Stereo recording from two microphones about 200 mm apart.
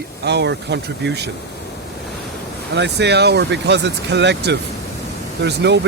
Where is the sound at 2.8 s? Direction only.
60° right (ahead or behind).